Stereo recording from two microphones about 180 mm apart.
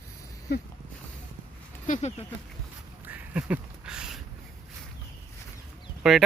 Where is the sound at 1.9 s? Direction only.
40° left (ahead or behind).